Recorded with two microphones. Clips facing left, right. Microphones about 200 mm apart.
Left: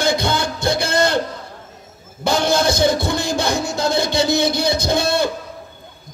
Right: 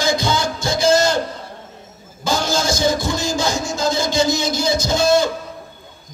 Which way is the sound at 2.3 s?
60° left (ahead or behind).